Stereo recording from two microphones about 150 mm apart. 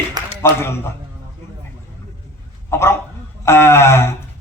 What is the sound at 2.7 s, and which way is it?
A man's voice, 15° left (ahead or behind).